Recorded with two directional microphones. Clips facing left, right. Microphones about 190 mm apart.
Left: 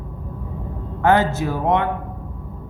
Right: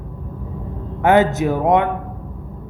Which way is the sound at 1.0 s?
20° right (ahead or behind).